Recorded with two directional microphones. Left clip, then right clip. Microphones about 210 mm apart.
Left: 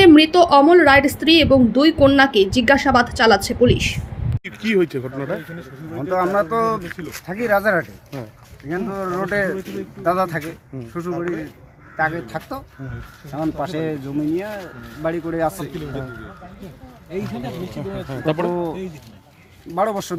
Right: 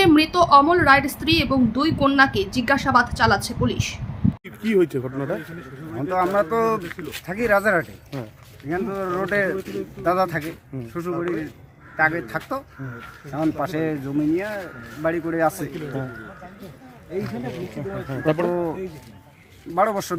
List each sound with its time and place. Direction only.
0.0 s a woman's voice: 10° left (ahead or behind)
4.4 s speech: 5° right (ahead or behind)
17.7 s speech: centre (ahead or behind)
19.7 s speech: centre (ahead or behind)